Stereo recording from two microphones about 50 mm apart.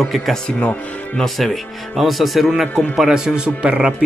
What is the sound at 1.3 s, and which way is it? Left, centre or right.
Speech, centre.